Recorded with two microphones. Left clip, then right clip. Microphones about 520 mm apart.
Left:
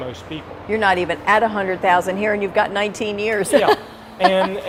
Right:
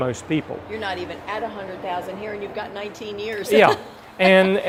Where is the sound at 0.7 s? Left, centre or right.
Left.